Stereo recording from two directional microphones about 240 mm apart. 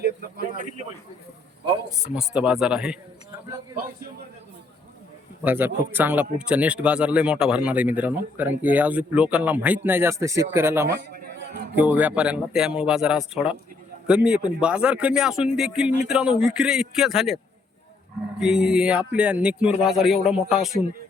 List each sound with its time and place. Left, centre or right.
0.0 s a sound: right
2.1 s speech: centre
5.4 s a man's voice: centre
10.8 s a sound: right
11.8 s speech: centre
18.3 s speech: centre